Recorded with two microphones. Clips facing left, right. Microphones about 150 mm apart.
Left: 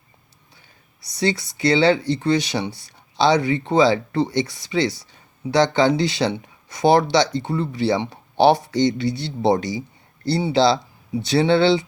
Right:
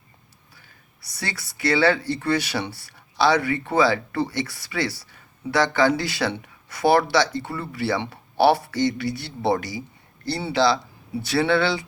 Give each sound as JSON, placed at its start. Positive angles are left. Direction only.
{"t": 1.2, "sound": "speech", "side_deg": 20}